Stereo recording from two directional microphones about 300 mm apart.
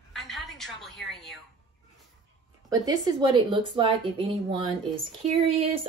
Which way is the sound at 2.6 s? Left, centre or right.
Centre.